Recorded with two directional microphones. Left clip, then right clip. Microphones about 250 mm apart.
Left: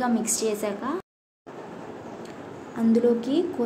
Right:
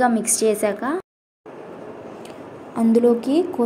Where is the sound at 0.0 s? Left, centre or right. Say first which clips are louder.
Right 7 dB; right.